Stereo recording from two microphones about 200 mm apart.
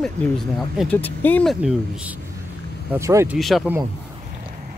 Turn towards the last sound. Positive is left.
turn(degrees=0)  # may be behind; listen again after turning